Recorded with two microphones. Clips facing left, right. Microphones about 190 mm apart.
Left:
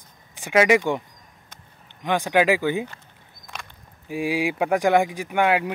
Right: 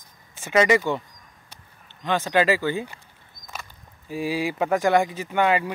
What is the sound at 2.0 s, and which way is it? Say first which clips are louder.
Speech: left 1 dB; 15° left (ahead or behind).